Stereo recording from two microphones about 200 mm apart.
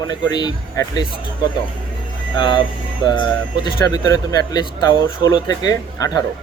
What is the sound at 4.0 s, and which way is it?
Speech, 20° left (ahead or behind).